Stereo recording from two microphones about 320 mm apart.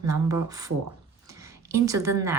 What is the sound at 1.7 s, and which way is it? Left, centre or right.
Speech, centre.